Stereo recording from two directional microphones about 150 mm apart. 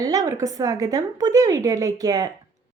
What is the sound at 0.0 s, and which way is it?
A woman's voice, 25° right (ahead or behind).